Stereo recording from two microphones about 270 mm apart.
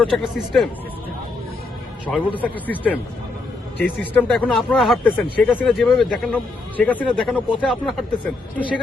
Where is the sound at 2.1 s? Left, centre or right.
Centre.